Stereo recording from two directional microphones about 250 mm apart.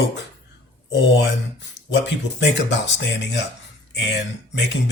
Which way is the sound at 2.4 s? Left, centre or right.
Left.